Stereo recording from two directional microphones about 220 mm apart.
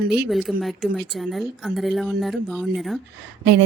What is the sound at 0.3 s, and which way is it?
Speech, centre (ahead or behind).